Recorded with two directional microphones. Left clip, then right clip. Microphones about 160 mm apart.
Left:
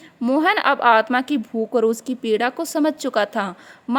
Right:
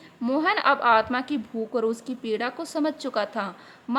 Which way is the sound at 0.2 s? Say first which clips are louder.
Left 5 dB; 40° left (ahead or behind).